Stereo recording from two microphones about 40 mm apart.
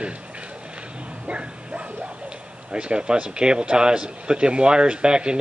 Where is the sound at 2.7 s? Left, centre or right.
Right.